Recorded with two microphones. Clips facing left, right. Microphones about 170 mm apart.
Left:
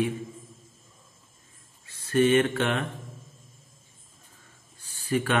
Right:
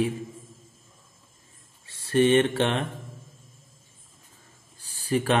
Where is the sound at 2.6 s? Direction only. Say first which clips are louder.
Right 2 dB; 25° right (ahead or behind).